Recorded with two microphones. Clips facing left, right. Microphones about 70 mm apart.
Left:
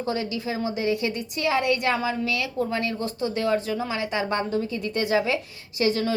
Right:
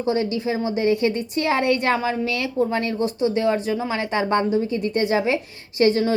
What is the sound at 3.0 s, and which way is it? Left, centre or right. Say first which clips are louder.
Speech: right 6 dB; right.